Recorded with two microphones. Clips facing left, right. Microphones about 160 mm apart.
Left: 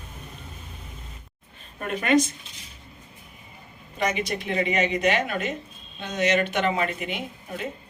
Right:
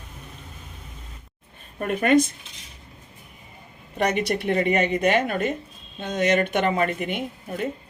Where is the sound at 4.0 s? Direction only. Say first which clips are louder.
Right 4 dB; 65° right (ahead or behind).